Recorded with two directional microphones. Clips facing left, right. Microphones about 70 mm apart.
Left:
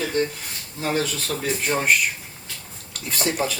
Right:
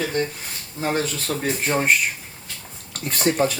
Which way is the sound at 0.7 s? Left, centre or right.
Right.